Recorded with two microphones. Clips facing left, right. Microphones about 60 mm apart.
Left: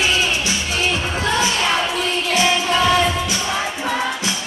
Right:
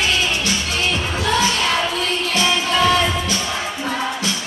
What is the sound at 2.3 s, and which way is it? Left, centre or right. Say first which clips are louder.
Music: left 2 dB; centre.